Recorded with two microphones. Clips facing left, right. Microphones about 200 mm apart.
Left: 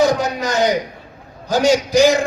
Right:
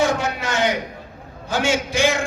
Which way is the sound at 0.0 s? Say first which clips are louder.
Left 4 dB; 40° left (ahead or behind).